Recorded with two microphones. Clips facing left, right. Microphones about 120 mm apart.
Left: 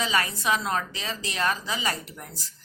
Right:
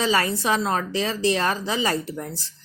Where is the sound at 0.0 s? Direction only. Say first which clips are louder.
Right 5 dB; 35° right (ahead or behind).